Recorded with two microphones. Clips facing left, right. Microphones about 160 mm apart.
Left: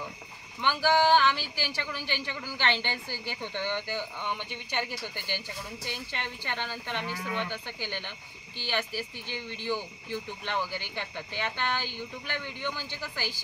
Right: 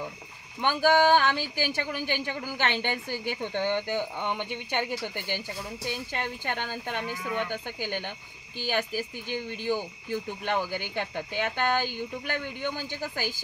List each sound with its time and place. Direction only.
0.6 s speech: 50° right (ahead or behind)